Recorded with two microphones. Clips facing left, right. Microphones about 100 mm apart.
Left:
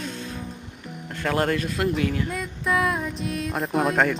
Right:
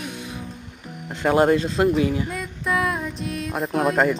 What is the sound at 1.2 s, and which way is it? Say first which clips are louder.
Speech: right 6 dB; 20° right (ahead or behind).